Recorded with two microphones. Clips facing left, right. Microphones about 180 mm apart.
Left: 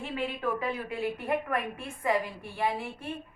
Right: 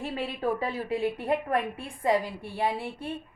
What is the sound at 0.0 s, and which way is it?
A woman's voice, 40° right (ahead or behind).